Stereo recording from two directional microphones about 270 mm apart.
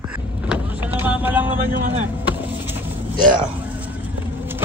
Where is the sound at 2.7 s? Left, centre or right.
Centre.